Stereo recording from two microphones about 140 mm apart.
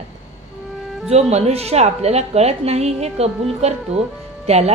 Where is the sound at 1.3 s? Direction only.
50° right (ahead or behind).